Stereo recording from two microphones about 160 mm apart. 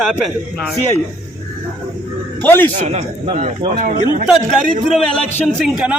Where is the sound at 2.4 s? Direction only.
10° left (ahead or behind).